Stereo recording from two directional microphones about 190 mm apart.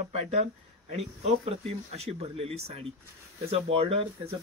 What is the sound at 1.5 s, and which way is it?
Speech, 30° right (ahead or behind).